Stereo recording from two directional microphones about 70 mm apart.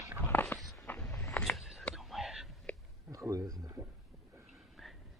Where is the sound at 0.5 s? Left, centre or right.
Centre.